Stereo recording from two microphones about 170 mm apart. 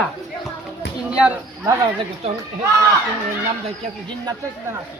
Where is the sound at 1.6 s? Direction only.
20° right (ahead or behind).